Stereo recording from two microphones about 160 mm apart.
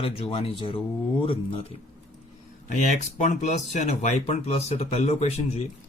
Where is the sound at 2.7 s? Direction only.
45° left (ahead or behind).